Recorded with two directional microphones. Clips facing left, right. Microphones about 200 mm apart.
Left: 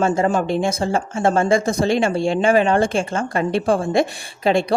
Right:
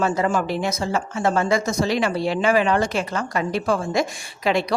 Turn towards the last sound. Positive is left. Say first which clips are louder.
# left 4 dB
turn(degrees=30)  # may be behind; listen again after turning